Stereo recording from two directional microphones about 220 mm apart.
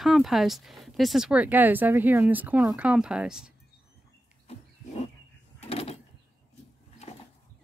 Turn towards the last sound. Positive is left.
turn(degrees=25)  # may be behind; listen again after turning